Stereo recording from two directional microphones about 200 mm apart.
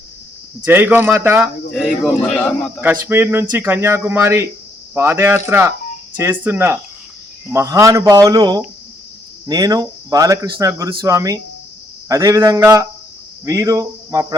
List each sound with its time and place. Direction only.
0.6 s speech: 10° right (ahead or behind)
1.7 s a man's voice: 5° left (ahead or behind)
2.8 s speech: 10° right (ahead or behind)